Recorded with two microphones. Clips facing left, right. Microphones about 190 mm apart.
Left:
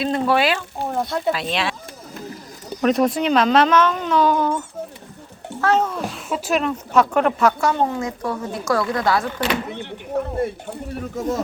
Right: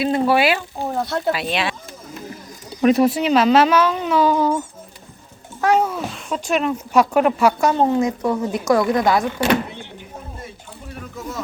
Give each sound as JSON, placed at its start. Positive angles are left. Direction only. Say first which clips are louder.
{"t": 0.0, "sound": "a child's voice", "louder": "right 2 dB", "side_deg": -5}
{"t": 2.8, "sound": "a child's voice", "louder": "right 2 dB", "side_deg": -5}
{"t": 7.7, "sound": "a woman's voice", "louder": "right 4 dB", "side_deg": -20}
{"t": 9.7, "sound": "speech", "louder": "left 11 dB", "side_deg": 65}